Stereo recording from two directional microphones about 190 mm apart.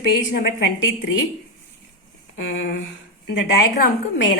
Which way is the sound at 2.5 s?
90° left.